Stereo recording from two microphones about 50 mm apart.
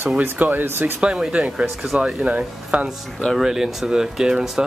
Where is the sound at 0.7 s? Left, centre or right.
Right.